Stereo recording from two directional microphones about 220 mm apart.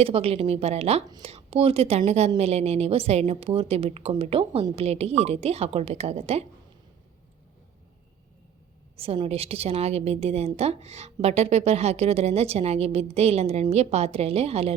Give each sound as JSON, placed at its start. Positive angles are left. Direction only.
{"t": 0.0, "sound": "a woman's voice", "side_deg": -25}
{"t": 9.0, "sound": "a woman's voice", "side_deg": -25}